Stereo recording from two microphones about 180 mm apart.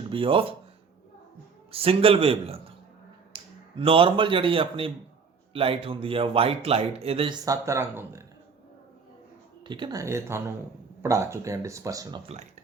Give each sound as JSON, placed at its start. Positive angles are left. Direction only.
{"t": 0.1, "sound": "speech", "side_deg": -30}
{"t": 1.7, "sound": "speech", "side_deg": -30}
{"t": 7.4, "sound": "speech", "side_deg": -20}
{"t": 9.6, "sound": "speech", "side_deg": -25}